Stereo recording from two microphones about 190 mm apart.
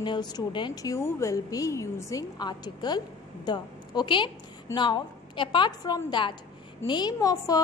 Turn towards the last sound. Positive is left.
turn(degrees=20)  # may be behind; listen again after turning